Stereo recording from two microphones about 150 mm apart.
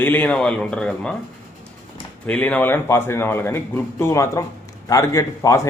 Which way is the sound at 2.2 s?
10° left (ahead or behind).